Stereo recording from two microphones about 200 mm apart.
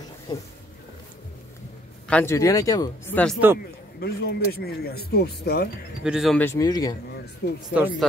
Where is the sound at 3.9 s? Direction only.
50° left (ahead or behind).